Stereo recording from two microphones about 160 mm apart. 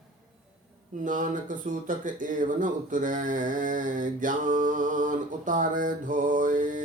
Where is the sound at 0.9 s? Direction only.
55° right (ahead or behind).